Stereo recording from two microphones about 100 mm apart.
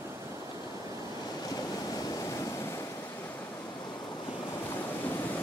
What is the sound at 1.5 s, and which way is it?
Waves, 40° left (ahead or behind).